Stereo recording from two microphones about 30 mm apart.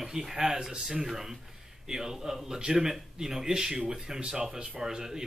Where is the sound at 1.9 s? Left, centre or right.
Centre.